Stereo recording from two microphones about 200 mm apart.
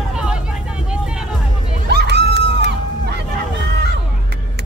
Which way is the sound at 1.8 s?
55° right (ahead or behind).